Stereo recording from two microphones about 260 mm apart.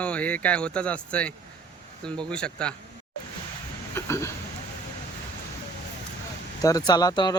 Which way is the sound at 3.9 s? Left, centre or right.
Centre.